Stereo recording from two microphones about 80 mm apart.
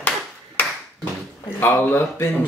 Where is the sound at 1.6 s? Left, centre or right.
Left.